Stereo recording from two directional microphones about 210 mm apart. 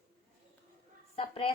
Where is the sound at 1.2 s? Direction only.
25° left (ahead or behind).